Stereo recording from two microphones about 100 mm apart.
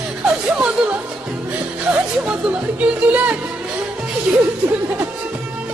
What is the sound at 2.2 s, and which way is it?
Chatter, 15° right (ahead or behind).